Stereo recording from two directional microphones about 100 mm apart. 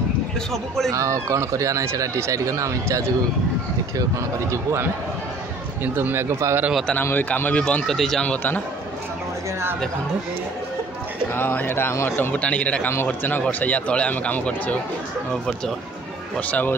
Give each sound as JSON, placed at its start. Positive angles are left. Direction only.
{"t": 0.5, "sound": "speech", "side_deg": 5}
{"t": 0.9, "sound": "speech", "side_deg": -30}
{"t": 5.9, "sound": "speech", "side_deg": -25}
{"t": 6.9, "sound": "speech", "side_deg": 20}
{"t": 11.3, "sound": "a man's voice", "side_deg": 20}
{"t": 16.3, "sound": "speech", "side_deg": 15}